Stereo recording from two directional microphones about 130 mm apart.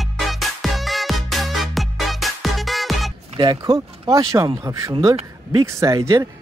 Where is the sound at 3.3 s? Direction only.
30° right (ahead or behind).